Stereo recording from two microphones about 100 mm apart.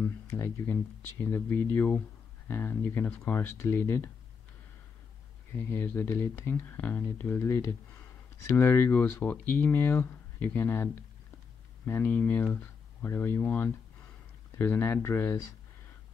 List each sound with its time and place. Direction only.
1.2 s speech: 20° left (ahead or behind)
5.6 s speech: 20° left (ahead or behind)